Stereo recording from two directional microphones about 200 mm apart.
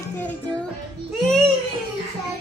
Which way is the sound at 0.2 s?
5° left (ahead or behind).